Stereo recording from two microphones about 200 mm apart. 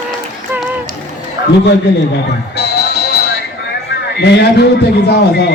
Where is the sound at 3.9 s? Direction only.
55° left (ahead or behind).